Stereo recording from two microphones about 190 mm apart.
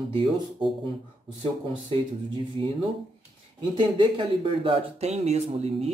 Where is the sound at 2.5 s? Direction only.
30° right (ahead or behind).